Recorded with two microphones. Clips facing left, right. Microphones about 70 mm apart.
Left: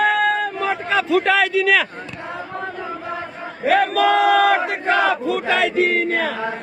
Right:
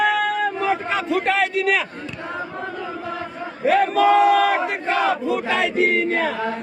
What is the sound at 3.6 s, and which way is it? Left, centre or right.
Battle cry, left.